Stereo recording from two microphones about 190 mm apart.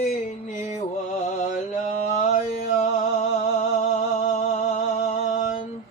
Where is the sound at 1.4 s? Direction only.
40° left (ahead or behind).